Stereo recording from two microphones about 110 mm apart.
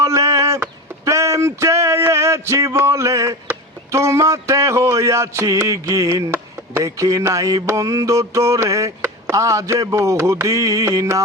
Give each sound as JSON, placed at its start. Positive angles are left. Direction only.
{"t": 0.0, "sound": "speech", "side_deg": -30}